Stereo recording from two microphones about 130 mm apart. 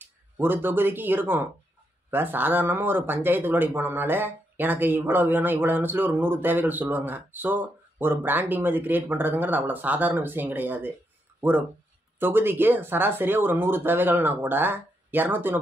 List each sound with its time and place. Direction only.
0.0 s speech: 15° right (ahead or behind)
12.2 s speech: 15° right (ahead or behind)